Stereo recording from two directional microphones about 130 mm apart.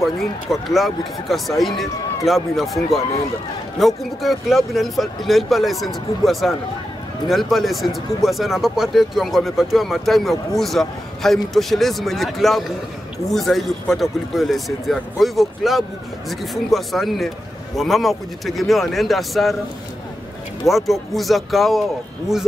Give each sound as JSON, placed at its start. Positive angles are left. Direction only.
{"t": 0.0, "sound": "speech", "side_deg": 0}
{"t": 20.6, "sound": "speech", "side_deg": 0}